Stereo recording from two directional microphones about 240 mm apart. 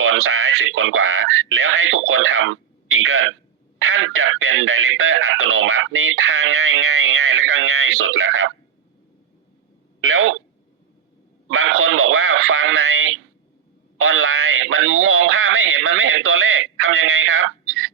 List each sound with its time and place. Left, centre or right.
0.0 s a man's voice: right
10.0 s speech: right
11.4 s a man's voice: right